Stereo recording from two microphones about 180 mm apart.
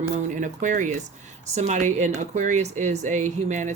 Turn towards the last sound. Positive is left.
turn(degrees=-45)  # may be behind; listen again after turning